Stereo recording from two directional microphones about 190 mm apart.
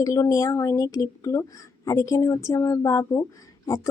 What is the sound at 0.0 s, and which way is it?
A woman's voice, 15° left (ahead or behind).